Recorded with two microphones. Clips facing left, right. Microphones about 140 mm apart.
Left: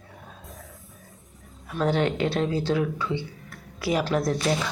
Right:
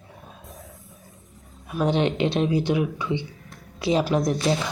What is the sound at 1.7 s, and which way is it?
Speech, 20° right (ahead or behind).